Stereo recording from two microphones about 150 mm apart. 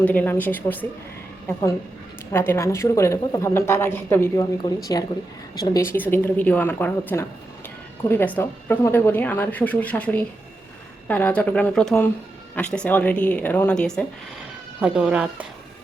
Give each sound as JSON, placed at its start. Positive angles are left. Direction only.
{"t": 0.0, "sound": "speech", "side_deg": 10}
{"t": 2.3, "sound": "speech", "side_deg": 15}